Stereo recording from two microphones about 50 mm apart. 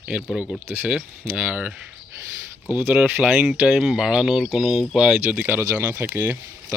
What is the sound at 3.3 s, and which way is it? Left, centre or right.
Speech, centre.